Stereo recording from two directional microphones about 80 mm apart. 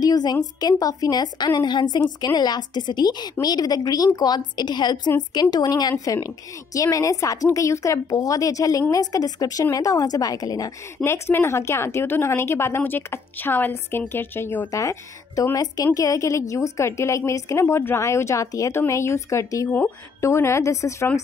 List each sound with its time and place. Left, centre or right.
0.0 s a woman's voice: left
6.1 s a woman's voice: left
11.1 s a woman's voice: left
14.7 s a woman's voice: left